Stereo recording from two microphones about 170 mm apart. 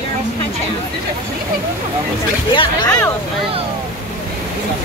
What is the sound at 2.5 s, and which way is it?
Speech, 25° left (ahead or behind).